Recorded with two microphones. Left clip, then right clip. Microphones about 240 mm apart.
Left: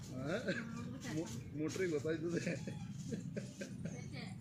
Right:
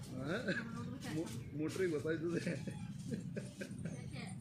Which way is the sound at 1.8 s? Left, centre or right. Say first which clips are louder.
Right 1 dB; centre.